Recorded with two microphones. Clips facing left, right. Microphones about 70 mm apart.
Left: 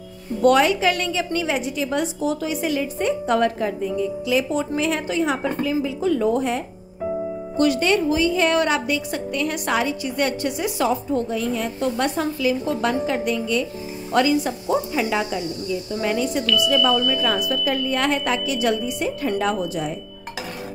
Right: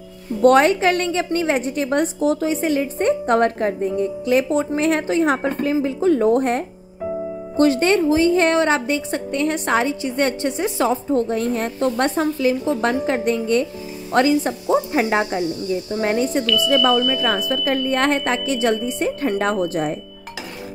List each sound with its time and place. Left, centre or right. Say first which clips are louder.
0.4 s a woman's voice: right 3 dB; right
6.2 s speech: right 4 dB; right
7.5 s a woman's voice: right 3 dB; right
12.2 s a woman's voice: right 3 dB; right
16.9 s speech: right 2 dB; centre
17.5 s a woman's voice: right 2 dB; right